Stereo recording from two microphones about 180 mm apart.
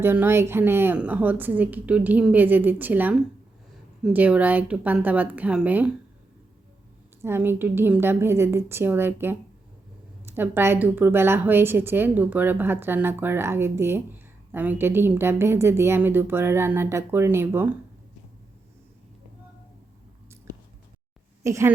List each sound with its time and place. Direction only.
0.0 s a woman's voice: 10° right (ahead or behind)
7.2 s a woman's voice: 10° right (ahead or behind)
21.4 s a woman's voice: 15° right (ahead or behind)